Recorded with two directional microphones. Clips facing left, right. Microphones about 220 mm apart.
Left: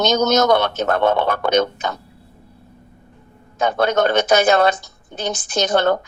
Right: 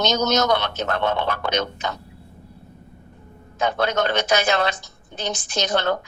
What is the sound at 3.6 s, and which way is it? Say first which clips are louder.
Speech: left 4 dB; 50° left (ahead or behind).